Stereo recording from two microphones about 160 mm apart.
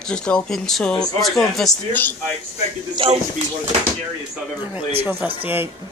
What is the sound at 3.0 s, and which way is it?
Speech, 35° right (ahead or behind).